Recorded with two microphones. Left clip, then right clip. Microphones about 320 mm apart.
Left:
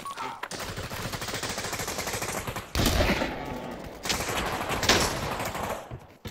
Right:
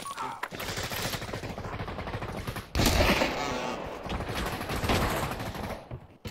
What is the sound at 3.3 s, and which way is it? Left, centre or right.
Music, right.